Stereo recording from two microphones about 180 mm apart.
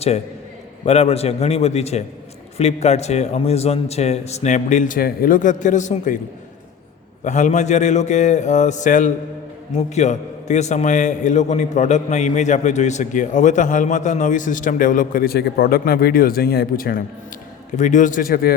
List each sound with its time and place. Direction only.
0.9 s a man's voice: 35° left (ahead or behind)
7.3 s a man's voice: 40° left (ahead or behind)
17.7 s a man's voice: 45° left (ahead or behind)